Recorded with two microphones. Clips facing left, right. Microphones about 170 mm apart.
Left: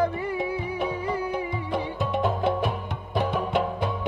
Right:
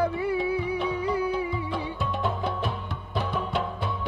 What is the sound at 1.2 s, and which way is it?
Music, 20° left (ahead or behind).